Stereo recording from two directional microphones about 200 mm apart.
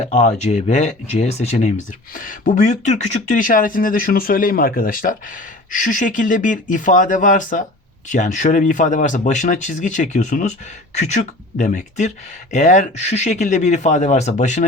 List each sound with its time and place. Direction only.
0.0 s speech: 35° left (ahead or behind)